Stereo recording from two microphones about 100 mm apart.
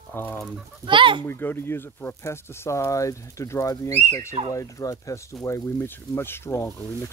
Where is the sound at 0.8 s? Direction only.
55° right (ahead or behind).